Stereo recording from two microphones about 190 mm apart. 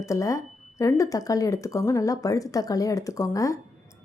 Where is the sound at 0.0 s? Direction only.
15° left (ahead or behind).